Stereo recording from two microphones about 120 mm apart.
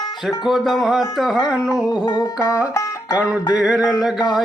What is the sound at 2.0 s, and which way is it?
Music, 35° left (ahead or behind).